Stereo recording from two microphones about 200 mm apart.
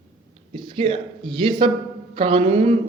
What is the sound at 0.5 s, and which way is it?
A man's voice, 25° right (ahead or behind).